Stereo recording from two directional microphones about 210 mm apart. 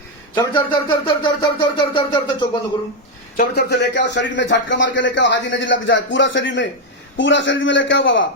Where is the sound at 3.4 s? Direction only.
50° left (ahead or behind).